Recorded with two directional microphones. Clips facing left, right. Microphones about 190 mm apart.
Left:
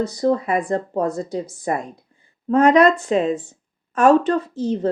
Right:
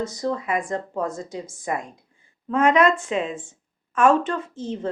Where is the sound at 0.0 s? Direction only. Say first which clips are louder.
Left 7 dB; 35° left (ahead or behind).